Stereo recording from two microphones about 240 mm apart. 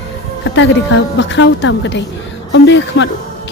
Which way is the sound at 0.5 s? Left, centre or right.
Left.